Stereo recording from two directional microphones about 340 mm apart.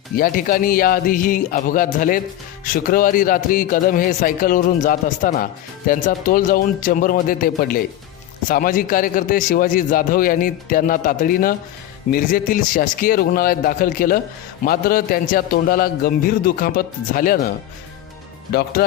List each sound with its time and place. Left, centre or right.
0.2 s a man's voice: left